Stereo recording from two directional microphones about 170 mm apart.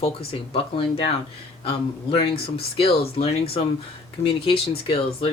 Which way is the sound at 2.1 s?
30° left (ahead or behind).